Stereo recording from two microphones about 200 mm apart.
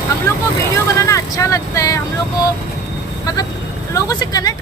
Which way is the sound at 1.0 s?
15° left (ahead or behind).